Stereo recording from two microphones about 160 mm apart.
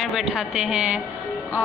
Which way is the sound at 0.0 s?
Centre (ahead or behind).